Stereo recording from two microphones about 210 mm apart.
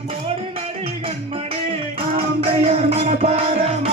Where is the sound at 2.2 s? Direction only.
30° right (ahead or behind).